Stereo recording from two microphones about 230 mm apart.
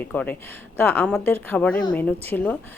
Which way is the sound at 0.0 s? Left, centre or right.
Centre.